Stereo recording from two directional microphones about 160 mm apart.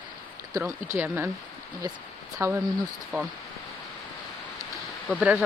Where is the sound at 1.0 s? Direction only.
15° right (ahead or behind).